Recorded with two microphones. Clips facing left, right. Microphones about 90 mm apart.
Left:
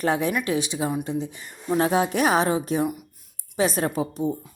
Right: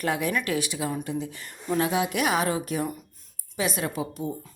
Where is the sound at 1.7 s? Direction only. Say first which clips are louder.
Left 4 dB; 35° left (ahead or behind).